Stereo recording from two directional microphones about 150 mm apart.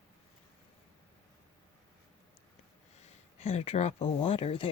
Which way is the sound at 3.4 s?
45° left (ahead or behind).